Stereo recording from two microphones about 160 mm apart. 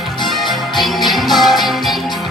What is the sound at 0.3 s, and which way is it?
Music, centre (ahead or behind).